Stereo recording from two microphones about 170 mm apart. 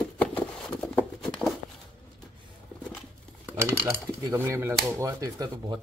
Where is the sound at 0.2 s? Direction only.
5° left (ahead or behind).